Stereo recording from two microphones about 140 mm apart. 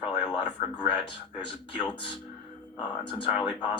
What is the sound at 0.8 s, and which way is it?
Speech, 35° left (ahead or behind).